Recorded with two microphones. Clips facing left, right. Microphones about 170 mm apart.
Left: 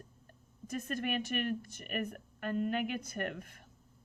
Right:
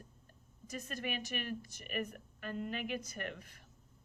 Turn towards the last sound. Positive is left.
turn(degrees=50)  # may be behind; listen again after turning